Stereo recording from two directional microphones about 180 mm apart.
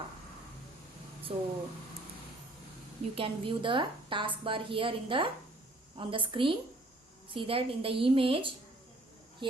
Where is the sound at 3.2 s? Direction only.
30° right (ahead or behind).